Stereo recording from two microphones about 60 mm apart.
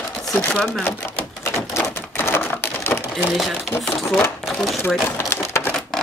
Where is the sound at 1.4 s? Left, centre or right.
Left.